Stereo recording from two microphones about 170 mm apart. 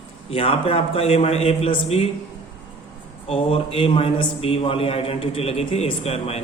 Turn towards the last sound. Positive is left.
turn(degrees=35)  # may be behind; listen again after turning